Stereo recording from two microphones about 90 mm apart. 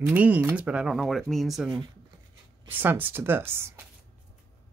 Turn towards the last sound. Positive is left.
turn(degrees=-25)  # may be behind; listen again after turning